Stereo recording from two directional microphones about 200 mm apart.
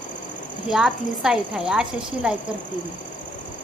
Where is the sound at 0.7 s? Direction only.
Centre (ahead or behind).